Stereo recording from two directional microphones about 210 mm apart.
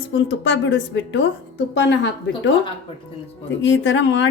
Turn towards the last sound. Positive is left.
turn(degrees=60)  # may be behind; listen again after turning